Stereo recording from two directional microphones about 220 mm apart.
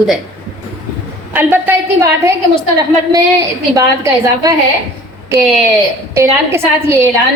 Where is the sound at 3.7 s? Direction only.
15° right (ahead or behind).